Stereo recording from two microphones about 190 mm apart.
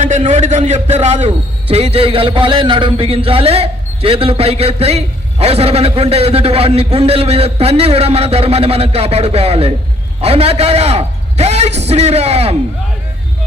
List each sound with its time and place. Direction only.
0.0 s a man's voice: 40° right (ahead or behind)